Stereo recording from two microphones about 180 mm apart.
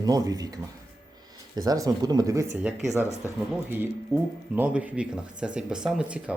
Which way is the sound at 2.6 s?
Centre (ahead or behind).